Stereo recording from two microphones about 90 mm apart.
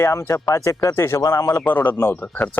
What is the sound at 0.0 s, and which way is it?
Speech, 30° left (ahead or behind).